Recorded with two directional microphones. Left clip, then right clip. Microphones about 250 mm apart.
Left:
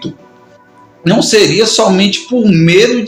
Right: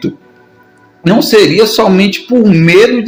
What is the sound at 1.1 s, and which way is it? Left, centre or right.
Speech, right.